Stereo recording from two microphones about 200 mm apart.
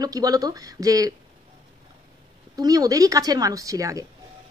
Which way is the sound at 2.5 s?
20° right (ahead or behind).